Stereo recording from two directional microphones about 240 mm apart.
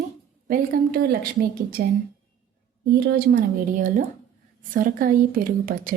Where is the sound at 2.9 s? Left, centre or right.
Right.